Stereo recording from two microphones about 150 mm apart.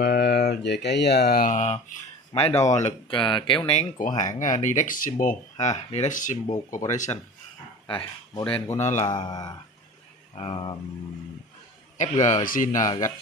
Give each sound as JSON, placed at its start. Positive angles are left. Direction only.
{"t": 0.0, "sound": "speech", "side_deg": 90}
{"t": 2.3, "sound": "speech", "side_deg": 40}
{"t": 3.1, "sound": "speech", "side_deg": 35}
{"t": 4.2, "sound": "speech", "side_deg": 55}
{"t": 7.8, "sound": "speech", "side_deg": 30}
{"t": 8.7, "sound": "speech", "side_deg": 50}
{"t": 9.0, "sound": "speech", "side_deg": 30}
{"t": 10.3, "sound": "speech", "side_deg": 40}
{"t": 12.0, "sound": "speech", "side_deg": 55}
{"t": 12.4, "sound": "speech", "side_deg": 65}
{"t": 12.8, "sound": "speech", "side_deg": 25}